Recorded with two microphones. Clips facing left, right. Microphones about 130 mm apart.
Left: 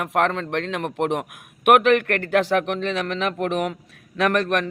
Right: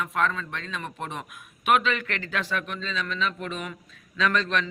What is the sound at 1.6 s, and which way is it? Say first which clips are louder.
A woman's voice: left 8 dB; 65° left (ahead or behind).